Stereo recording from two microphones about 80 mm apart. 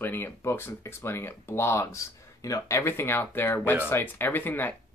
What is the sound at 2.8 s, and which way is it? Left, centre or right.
Speech, left.